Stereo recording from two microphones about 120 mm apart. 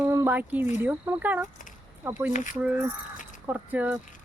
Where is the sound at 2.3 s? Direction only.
90° left.